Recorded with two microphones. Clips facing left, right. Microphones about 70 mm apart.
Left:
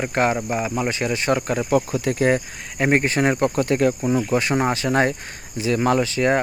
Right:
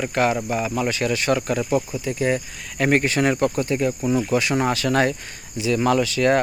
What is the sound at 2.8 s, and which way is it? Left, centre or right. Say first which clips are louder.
Speech: even; left.